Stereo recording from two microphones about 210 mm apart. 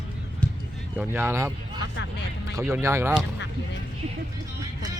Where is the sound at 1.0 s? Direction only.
10° right (ahead or behind).